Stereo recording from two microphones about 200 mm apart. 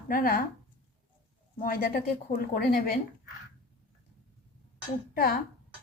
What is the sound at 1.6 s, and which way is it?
Speech, 45° left (ahead or behind).